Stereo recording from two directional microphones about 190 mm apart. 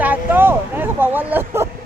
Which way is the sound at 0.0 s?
10° right (ahead or behind).